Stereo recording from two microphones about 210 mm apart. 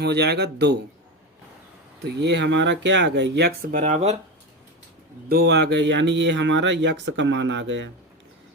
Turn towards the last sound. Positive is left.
turn(degrees=-60)  # may be behind; listen again after turning